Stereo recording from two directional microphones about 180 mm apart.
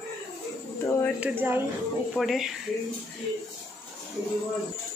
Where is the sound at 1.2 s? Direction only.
10° right (ahead or behind).